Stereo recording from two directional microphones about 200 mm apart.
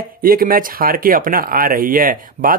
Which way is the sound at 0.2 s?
45° right (ahead or behind).